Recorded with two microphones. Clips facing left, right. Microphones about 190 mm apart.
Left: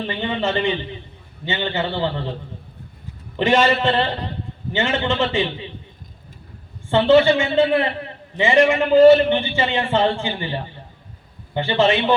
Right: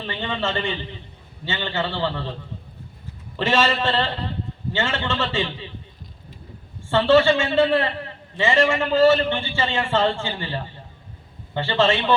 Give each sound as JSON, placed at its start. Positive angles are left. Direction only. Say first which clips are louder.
{"t": 0.0, "sound": "a man's voice", "louder": "left 4 dB", "side_deg": 15}
{"t": 3.3, "sound": "a man's voice", "louder": "left 4 dB", "side_deg": 15}
{"t": 6.9, "sound": "a man's voice", "louder": "left 2 dB", "side_deg": 20}